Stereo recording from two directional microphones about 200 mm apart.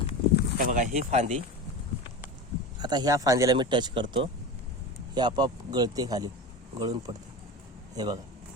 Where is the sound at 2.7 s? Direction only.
20° right (ahead or behind).